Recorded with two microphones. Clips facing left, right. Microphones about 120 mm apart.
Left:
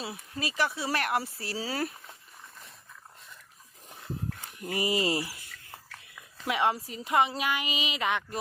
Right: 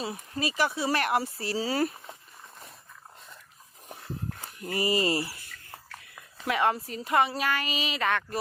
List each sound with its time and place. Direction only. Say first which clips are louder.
0.3 s speech: right 2 dB; centre (ahead or behind)
4.7 s a woman's voice: right 2 dB; 15° left (ahead or behind)
6.5 s a woman's voice: right 1 dB; 15° left (ahead or behind)